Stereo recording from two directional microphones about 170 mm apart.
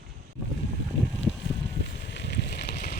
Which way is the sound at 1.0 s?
Centre (ahead or behind).